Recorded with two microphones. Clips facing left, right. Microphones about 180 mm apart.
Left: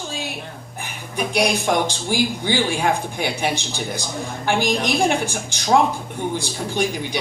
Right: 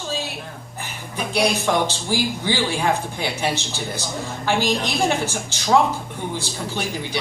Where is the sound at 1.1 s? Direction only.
15° left (ahead or behind).